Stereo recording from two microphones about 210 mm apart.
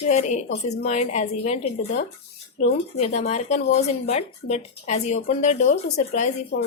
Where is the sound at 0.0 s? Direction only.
35° left (ahead or behind).